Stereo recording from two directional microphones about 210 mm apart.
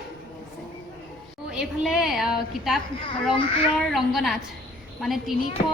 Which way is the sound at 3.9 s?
Centre (ahead or behind).